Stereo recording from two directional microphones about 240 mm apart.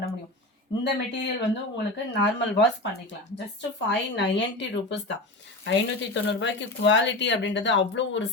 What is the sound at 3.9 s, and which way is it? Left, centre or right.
Speech, left.